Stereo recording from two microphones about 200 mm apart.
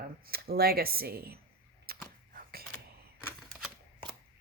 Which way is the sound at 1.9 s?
50° right (ahead or behind).